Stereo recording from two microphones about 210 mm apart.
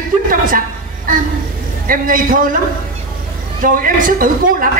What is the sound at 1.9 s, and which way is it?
Speech, 40° right (ahead or behind).